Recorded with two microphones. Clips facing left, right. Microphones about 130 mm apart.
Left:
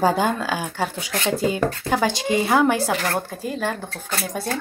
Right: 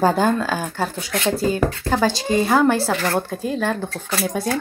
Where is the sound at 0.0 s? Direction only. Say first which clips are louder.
Right 2 dB; 15° left (ahead or behind).